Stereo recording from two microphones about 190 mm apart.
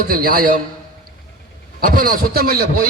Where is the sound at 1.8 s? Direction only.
50° right (ahead or behind).